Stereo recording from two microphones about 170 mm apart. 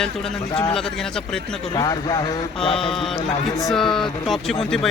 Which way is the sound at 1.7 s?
25° left (ahead or behind).